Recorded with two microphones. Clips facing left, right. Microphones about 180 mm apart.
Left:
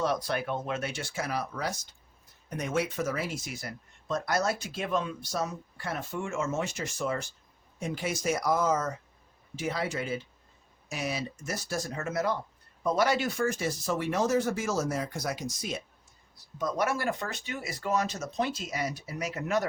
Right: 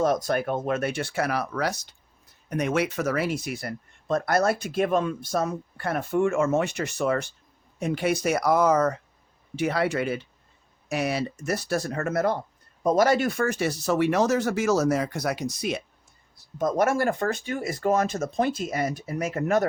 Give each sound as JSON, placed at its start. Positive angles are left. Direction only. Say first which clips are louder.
{"t": 0.0, "sound": "speech", "louder": "right 6 dB", "side_deg": -45}
{"t": 12.8, "sound": "speech", "louder": "right 6 dB", "side_deg": -45}
{"t": 16.6, "sound": "speech", "louder": "right 7 dB", "side_deg": -50}